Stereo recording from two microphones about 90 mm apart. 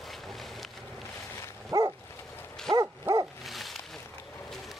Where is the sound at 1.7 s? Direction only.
50° right (ahead or behind).